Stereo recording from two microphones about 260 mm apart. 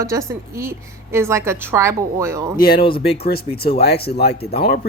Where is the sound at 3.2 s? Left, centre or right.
Left.